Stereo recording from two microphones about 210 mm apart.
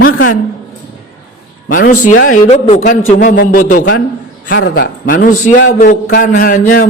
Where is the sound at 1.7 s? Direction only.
40° left (ahead or behind).